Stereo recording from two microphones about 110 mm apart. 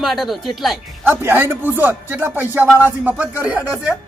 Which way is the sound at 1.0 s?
20° right (ahead or behind).